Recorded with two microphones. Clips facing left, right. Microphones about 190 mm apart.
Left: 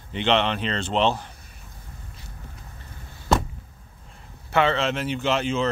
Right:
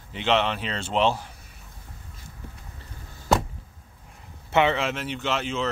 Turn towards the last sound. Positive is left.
turn(degrees=0)  # may be behind; listen again after turning